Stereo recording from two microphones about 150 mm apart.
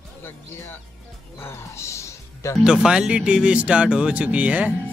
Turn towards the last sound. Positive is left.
turn(degrees=-10)  # may be behind; listen again after turning